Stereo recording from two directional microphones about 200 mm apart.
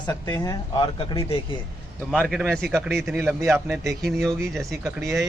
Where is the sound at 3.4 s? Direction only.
10° right (ahead or behind).